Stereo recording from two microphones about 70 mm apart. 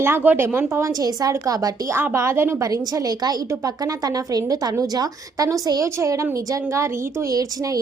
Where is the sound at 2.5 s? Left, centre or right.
Right.